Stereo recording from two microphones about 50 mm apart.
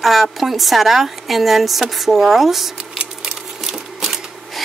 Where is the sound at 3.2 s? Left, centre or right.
Centre.